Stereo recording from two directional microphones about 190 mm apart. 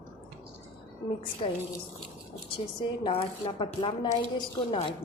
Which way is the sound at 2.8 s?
25° left (ahead or behind).